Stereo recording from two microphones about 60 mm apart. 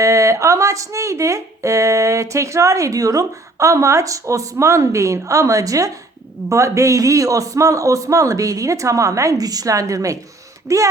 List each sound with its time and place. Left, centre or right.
0.0 s a man's voice: right